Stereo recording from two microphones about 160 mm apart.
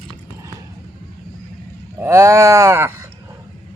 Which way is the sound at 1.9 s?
15° right (ahead or behind).